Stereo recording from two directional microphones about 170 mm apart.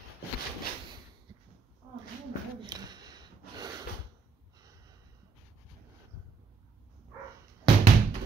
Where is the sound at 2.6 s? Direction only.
25° right (ahead or behind).